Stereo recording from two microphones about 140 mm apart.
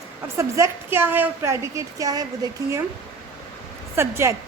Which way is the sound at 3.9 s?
20° right (ahead or behind).